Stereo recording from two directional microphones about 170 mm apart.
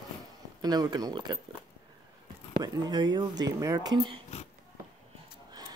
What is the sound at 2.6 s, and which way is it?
Speech, 20° right (ahead or behind).